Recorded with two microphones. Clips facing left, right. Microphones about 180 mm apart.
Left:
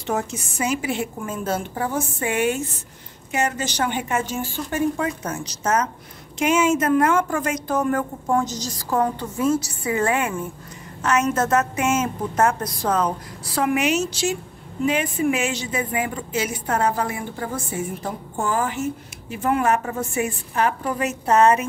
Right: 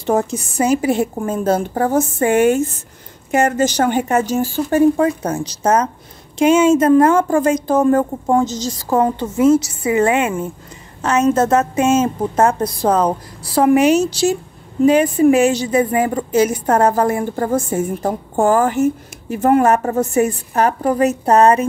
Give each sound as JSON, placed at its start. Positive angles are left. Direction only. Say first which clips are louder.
{"t": 0.0, "sound": "a woman's voice", "louder": "right 8 dB", "side_deg": -35}